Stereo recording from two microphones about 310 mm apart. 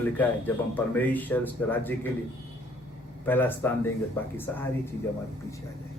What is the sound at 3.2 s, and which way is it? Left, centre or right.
Speech, centre.